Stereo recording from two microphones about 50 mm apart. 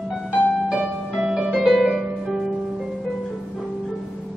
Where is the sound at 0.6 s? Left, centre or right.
Centre.